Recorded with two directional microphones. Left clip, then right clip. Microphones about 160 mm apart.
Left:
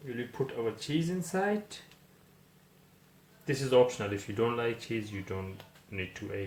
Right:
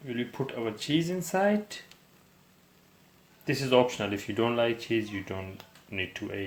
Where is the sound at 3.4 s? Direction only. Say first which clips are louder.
Right 1 dB; 45° right (ahead or behind).